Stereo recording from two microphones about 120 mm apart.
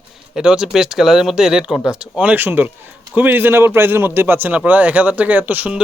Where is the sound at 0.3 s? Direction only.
5° right (ahead or behind).